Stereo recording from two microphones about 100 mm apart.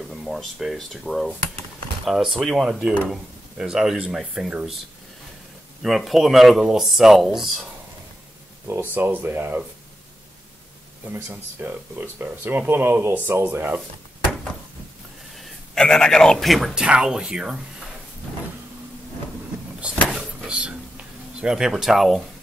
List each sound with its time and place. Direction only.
0.1 s speech: centre (ahead or behind)
5.8 s speech: centre (ahead or behind)
8.9 s speech: 20° right (ahead or behind)
11.1 s speech: 20° right (ahead or behind)
15.3 s a man's voice: 5° left (ahead or behind)
19.8 s vehicle: 5° right (ahead or behind)
21.4 s speech: 5° right (ahead or behind)